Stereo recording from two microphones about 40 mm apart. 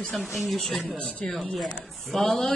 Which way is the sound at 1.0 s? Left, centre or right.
Left.